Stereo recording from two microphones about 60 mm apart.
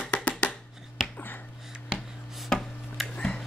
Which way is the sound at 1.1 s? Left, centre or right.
Left.